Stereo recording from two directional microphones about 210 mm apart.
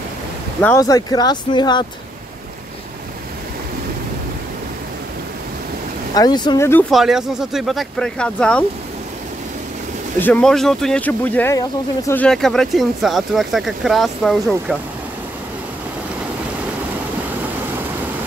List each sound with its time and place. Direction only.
0.6 s speech: 15° left (ahead or behind)
6.1 s speech: 20° left (ahead or behind)
6.9 s speech: centre (ahead or behind)
10.1 s speech: 10° left (ahead or behind)